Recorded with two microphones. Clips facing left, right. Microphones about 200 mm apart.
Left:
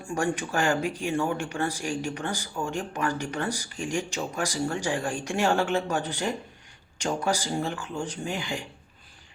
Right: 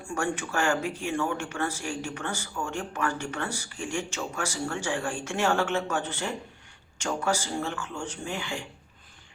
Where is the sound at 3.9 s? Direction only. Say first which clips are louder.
Left 2 dB; 35° left (ahead or behind).